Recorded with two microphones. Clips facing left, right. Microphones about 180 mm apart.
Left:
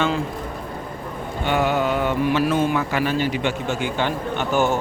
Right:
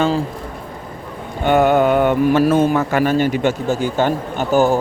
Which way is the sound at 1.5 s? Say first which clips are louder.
Right 7 dB; 50° right (ahead or behind).